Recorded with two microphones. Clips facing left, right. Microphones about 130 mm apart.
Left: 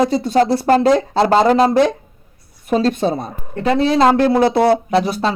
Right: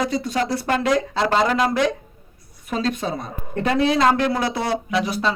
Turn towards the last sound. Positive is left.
turn(degrees=30)  # may be behind; listen again after turning